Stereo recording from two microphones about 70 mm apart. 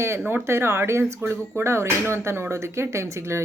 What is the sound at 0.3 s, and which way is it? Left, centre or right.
Speech, right.